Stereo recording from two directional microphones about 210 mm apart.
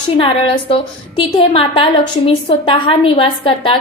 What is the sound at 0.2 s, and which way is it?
A woman's voice, 25° left (ahead or behind).